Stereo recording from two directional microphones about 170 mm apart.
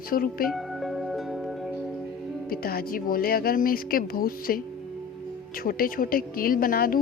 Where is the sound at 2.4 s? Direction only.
60° left (ahead or behind).